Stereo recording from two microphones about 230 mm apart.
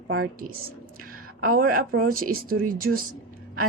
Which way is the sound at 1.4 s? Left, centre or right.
Right.